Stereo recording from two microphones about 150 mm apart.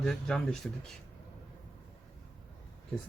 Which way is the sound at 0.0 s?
5° left (ahead or behind).